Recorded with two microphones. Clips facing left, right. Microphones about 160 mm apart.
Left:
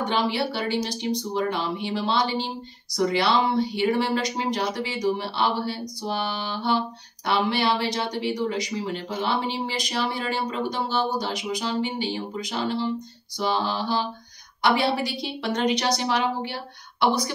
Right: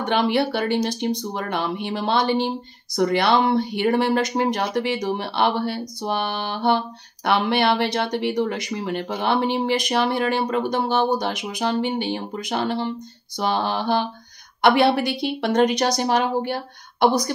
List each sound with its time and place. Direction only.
0.0 s a woman's voice: 60° right (ahead or behind); by 17.3 s 45° right (ahead or behind)